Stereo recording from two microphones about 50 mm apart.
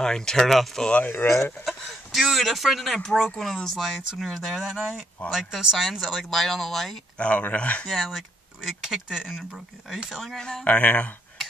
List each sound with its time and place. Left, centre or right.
0.0 s speech: centre
1.1 s speech: left
1.6 s speech: centre
7.2 s speech: left
7.9 s speech: centre
10.3 s speech: centre
10.6 s speech: left